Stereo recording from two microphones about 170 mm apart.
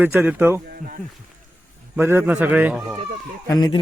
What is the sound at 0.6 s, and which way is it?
Speech, 55° right (ahead or behind).